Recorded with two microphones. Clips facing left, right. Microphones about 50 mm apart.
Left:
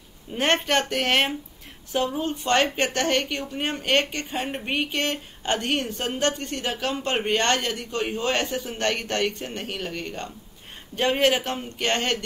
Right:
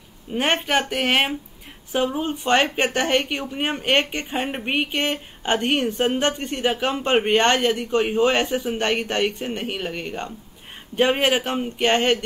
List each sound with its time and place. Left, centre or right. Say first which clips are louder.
0.3 s a woman's voice: right 1 dB; centre